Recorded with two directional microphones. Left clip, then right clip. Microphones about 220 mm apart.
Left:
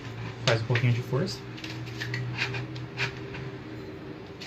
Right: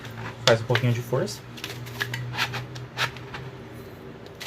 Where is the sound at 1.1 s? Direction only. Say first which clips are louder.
Right 5 dB; 45° right (ahead or behind).